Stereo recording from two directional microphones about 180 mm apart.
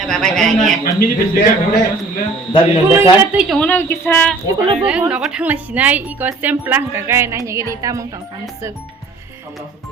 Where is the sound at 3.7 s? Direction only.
10° left (ahead or behind).